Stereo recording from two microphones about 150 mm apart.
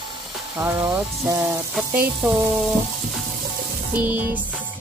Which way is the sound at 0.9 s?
20° right (ahead or behind).